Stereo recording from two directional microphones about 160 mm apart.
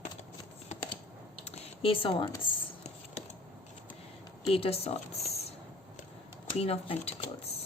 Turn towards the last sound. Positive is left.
turn(degrees=40)  # may be behind; listen again after turning